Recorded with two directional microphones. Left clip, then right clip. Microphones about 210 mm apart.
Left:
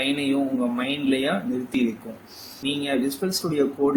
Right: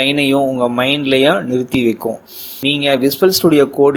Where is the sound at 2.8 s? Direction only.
45° right (ahead or behind).